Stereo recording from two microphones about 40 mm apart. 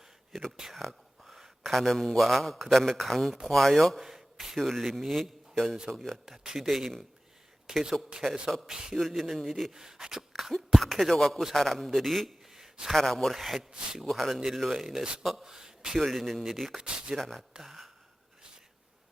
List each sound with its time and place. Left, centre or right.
0.7 s whispering: centre
1.4 s a sound: centre
1.9 s a man's voice: centre
4.0 s a man's voice: centre
9.0 s a man's voice: centre
9.7 s a sound: centre
10.7 s a man's voice: centre
12.5 s a sound: centre
12.9 s a man's voice: centre
13.3 s a man's voice: centre
16.0 s a man's voice: centre
16.7 s speech: centre
17.2 s a man's voice: centre
17.6 s speech: centre